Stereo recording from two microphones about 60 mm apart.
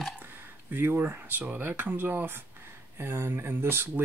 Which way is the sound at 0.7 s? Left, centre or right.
Right.